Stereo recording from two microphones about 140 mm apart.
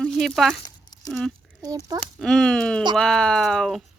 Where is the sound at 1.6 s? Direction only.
25° right (ahead or behind).